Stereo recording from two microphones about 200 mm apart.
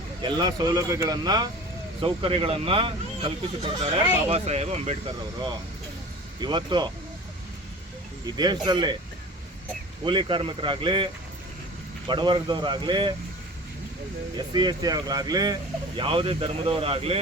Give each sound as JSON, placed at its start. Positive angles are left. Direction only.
{"t": 0.2, "sound": "speech", "side_deg": -20}
{"t": 6.4, "sound": "speech", "side_deg": -25}
{"t": 8.4, "sound": "speech", "side_deg": -20}
{"t": 10.0, "sound": "speech", "side_deg": -25}
{"t": 14.3, "sound": "speech", "side_deg": -20}